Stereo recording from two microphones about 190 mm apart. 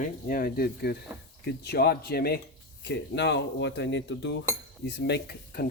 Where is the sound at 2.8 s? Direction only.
65° left (ahead or behind).